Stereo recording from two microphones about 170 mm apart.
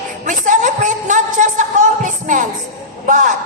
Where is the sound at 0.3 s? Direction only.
45° right (ahead or behind).